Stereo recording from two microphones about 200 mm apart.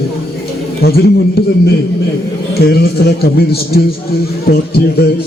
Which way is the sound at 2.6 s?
50° left (ahead or behind).